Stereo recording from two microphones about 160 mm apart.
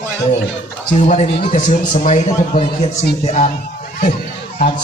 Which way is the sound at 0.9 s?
50° left (ahead or behind).